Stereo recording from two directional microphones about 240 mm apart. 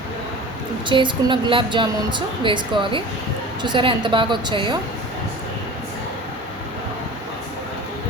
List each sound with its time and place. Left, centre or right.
0.9 s a woman's voice: centre